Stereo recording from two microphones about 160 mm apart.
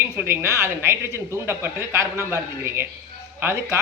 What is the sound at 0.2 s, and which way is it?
Speech, 15° right (ahead or behind).